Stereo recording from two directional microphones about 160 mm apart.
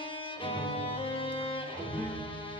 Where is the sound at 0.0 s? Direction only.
30° left (ahead or behind).